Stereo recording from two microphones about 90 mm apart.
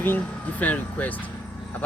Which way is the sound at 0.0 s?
20° left (ahead or behind).